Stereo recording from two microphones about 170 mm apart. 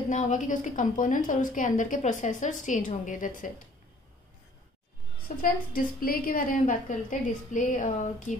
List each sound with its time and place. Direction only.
0.1 s a woman's voice: 45° left (ahead or behind)
5.4 s a woman's voice: 60° left (ahead or behind)